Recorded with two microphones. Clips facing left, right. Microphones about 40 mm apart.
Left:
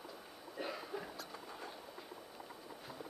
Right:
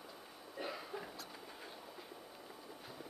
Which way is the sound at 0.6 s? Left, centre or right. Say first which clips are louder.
Left 1 dB; centre.